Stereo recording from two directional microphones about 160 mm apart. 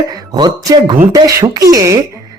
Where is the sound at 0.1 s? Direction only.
25° right (ahead or behind).